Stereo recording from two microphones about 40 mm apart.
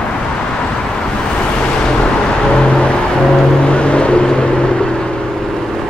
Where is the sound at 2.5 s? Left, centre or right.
Left.